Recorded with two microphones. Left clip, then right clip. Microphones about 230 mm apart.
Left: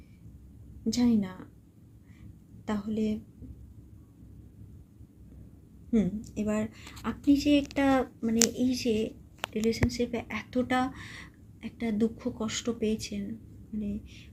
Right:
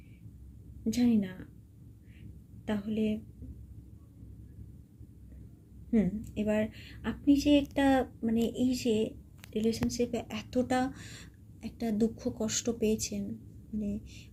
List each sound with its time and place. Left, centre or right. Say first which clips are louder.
0.9 s a woman's voice: left 2 dB; centre
2.6 s a woman's voice: left 1 dB; centre
5.9 s a woman's voice: left 1 dB; centre